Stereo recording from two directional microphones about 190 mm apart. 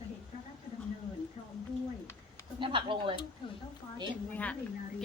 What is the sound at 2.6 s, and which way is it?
Speech, 25° right (ahead or behind).